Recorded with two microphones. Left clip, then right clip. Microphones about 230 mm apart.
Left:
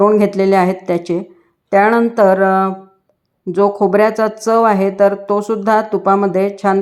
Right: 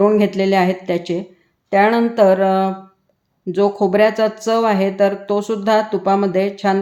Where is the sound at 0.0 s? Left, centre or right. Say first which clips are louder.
Left 3 dB; centre.